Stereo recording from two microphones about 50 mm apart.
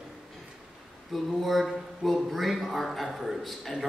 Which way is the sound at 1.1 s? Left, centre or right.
Centre.